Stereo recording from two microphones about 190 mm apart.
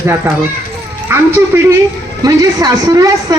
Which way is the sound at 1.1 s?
15° right (ahead or behind).